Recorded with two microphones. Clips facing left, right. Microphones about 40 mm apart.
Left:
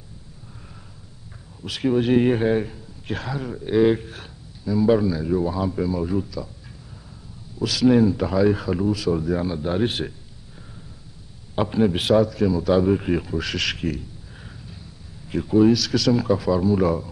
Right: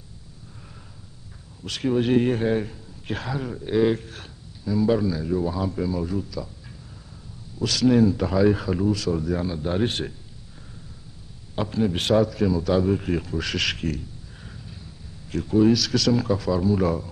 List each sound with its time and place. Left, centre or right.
1.6 s speech: centre
7.5 s speech: centre
11.5 s speech: centre
12.0 s speech: centre